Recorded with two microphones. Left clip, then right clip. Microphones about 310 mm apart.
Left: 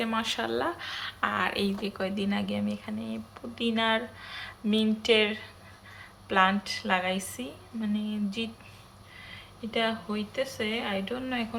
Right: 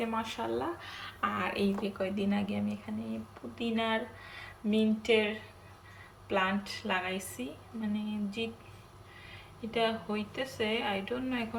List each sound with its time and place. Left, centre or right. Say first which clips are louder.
0.0 s speech: left 5 dB; centre